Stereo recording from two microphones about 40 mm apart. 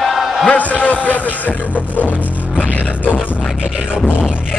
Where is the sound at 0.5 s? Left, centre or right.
Left.